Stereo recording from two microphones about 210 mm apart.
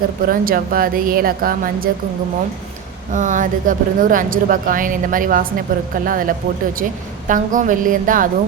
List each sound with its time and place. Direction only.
0.3 s a woman's voice: 45° right (ahead or behind)
3.1 s speech: 35° right (ahead or behind)